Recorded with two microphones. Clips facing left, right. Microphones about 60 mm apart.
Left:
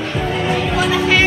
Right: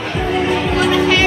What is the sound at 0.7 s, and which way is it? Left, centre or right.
Music, centre.